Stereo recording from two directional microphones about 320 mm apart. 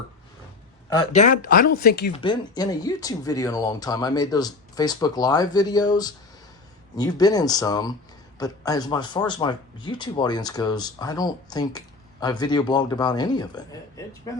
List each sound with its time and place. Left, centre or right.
1.1 s speech: left
2.1 s speech: centre